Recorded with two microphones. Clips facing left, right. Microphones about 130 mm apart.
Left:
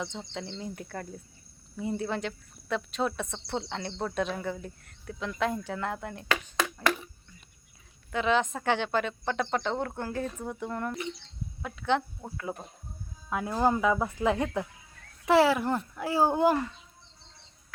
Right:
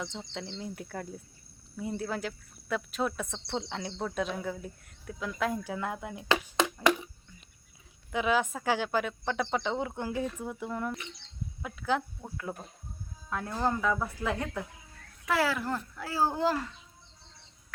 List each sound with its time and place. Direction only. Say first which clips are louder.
0.0 s speech: left 2 dB; centre (ahead or behind)
6.8 s a sound: right 3 dB; 15° right (ahead or behind)
8.1 s speech: left 1 dB; 10° right (ahead or behind)
13.5 s a child's voice: left 4 dB; 15° left (ahead or behind)